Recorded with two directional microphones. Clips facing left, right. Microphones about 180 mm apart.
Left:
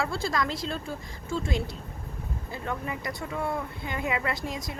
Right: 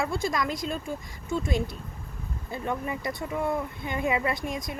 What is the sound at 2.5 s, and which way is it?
Speech, 20° right (ahead or behind).